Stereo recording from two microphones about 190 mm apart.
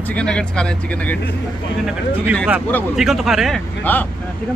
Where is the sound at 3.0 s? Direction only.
Centre (ahead or behind).